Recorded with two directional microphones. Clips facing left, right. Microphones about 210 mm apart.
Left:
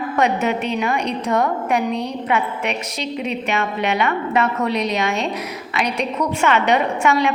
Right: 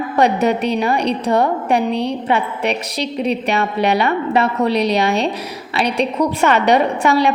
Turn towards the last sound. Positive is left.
turn(degrees=-35)  # may be behind; listen again after turning